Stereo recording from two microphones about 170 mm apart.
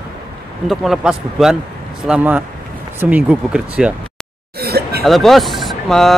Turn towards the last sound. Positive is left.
turn(degrees=0)  # may be behind; listen again after turning